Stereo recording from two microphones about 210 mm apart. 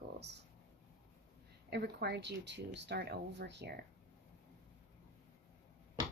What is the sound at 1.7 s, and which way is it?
Speech, 50° right (ahead or behind).